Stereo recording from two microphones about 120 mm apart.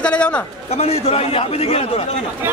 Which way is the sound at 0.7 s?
60° left (ahead or behind).